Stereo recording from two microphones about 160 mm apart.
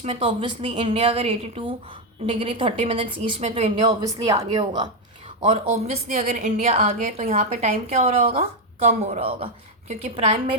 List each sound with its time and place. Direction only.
0.0 s a woman's voice: 35° right (ahead or behind)
5.4 s a woman's voice: 35° right (ahead or behind)